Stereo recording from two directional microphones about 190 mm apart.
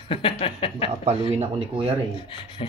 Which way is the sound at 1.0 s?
35° right (ahead or behind).